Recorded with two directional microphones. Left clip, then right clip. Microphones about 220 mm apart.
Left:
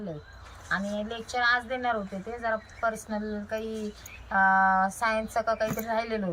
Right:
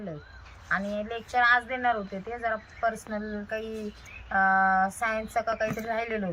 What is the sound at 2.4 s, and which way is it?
A woman's voice, centre (ahead or behind).